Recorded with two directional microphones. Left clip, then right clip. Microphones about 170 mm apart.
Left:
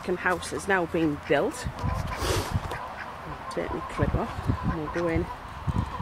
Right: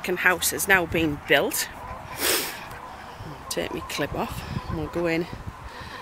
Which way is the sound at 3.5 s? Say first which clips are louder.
Right 3 dB; 20° right (ahead or behind).